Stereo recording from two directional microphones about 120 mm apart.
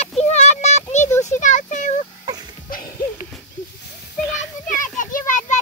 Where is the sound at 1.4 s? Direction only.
90° left.